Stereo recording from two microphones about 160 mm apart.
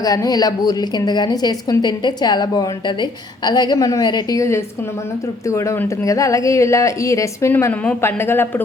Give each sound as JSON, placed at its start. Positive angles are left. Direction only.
{"t": 0.0, "sound": "a woman's voice", "side_deg": 20}